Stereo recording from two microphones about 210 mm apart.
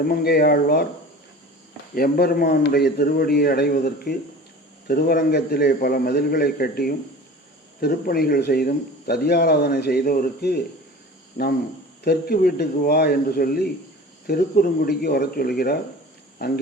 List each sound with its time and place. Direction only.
0.0 s speech: 50° left (ahead or behind)
2.0 s speech: 45° left (ahead or behind)